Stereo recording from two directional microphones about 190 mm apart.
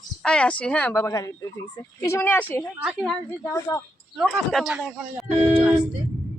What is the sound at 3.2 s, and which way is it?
Speech, 15° left (ahead or behind).